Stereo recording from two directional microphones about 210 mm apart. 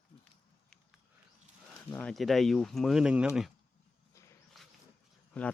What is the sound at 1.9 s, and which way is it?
Speech, 5° left (ahead or behind).